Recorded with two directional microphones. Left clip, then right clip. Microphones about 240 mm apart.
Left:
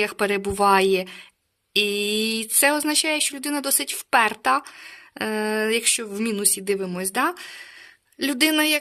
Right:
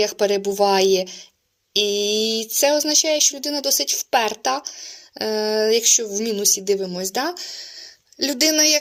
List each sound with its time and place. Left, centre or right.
0.0 s speech: left